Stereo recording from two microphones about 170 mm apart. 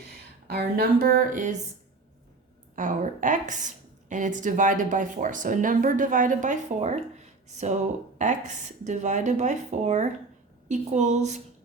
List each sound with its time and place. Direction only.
0.4 s speech: 65° right (ahead or behind); by 1.5 s 50° right (ahead or behind)
2.7 s speech: 50° right (ahead or behind)